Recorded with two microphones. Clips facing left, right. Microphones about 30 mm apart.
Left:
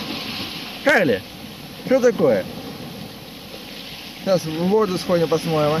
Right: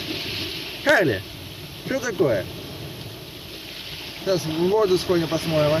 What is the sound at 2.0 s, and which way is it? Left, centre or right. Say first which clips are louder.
Speech: left 5 dB; left.